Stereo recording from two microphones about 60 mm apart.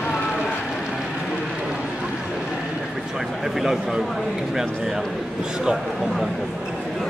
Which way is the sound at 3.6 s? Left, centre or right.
Centre.